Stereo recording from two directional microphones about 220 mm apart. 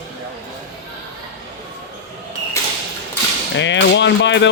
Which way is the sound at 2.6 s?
15° left (ahead or behind).